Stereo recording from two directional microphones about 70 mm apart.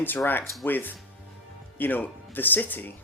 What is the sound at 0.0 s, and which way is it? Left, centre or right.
Speech, left.